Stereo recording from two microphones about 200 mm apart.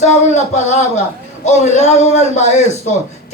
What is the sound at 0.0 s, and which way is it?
Speech, 35° left (ahead or behind).